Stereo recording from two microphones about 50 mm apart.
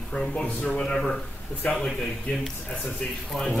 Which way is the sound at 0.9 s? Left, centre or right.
Centre.